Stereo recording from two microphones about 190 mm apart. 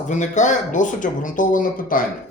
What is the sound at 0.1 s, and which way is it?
Speech, 40° left (ahead or behind).